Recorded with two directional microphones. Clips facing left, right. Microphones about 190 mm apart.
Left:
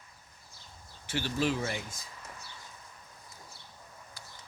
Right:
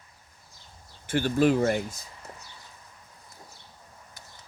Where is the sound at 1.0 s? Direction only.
50° right (ahead or behind).